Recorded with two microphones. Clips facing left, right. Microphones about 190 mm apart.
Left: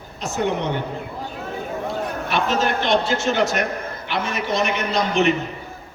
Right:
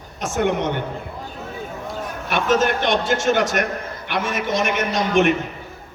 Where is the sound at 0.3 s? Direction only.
50° right (ahead or behind).